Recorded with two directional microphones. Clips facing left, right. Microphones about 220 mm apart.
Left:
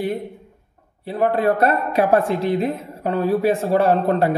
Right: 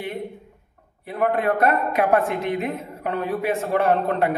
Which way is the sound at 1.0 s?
30° left (ahead or behind).